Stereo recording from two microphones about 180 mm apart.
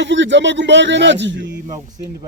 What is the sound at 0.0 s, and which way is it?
A man's voice, 90° right.